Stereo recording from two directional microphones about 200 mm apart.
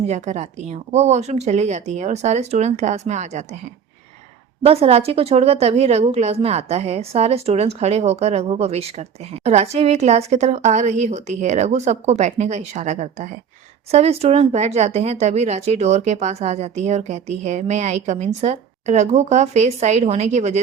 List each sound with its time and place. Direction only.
0.1 s a woman's voice: 35° right (ahead or behind)
4.6 s a woman's voice: 30° right (ahead or behind)